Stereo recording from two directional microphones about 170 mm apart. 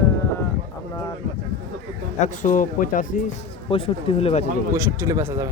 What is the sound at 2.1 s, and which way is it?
Speech, 45° left (ahead or behind).